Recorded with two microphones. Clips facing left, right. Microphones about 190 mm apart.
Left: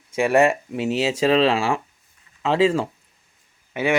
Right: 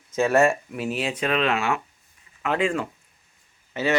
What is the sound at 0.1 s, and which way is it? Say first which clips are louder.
Speech: left 2 dB; 15° left (ahead or behind).